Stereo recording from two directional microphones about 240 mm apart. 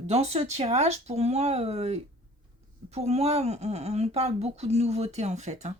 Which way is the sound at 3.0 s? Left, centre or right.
Right.